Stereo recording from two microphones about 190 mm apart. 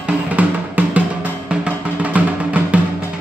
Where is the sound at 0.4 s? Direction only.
10° right (ahead or behind).